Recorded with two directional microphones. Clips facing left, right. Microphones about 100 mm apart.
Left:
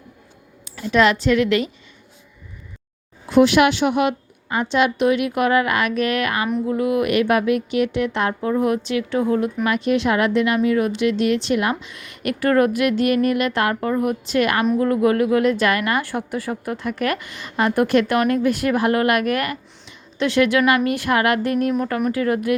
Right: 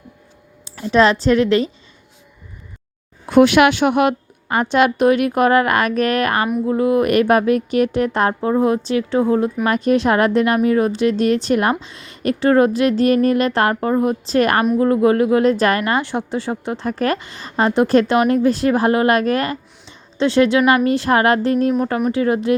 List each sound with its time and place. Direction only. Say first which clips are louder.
0.6 s speech: right 3 dB; 30° right (ahead or behind)
3.2 s a woman's voice: right 3 dB; 55° right (ahead or behind); by 14.7 s 40° right (ahead or behind)
14.8 s a woman's voice: right 3 dB; 30° right (ahead or behind)